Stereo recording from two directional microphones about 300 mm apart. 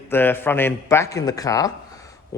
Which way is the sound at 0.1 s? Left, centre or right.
Centre.